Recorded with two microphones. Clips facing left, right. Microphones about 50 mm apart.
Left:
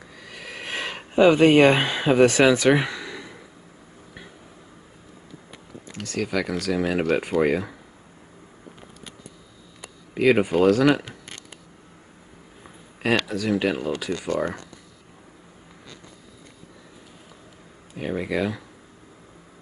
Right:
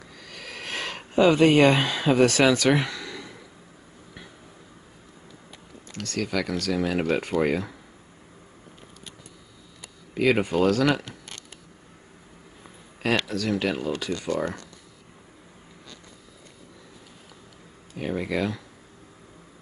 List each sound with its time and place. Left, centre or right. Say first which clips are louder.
0.2 s a sound: left 2 dB; centre
5.9 s speech: left 2 dB; centre
10.1 s speech: left 3 dB; centre
13.3 s speech: left 3 dB; centre
17.9 s speech: left 1 dB; centre